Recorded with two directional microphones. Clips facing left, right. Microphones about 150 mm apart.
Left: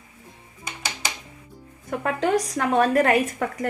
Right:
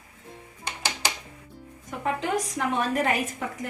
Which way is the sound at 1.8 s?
70° left (ahead or behind).